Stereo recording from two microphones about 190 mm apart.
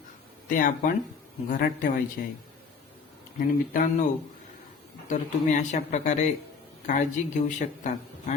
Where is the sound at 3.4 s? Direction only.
45° left (ahead or behind).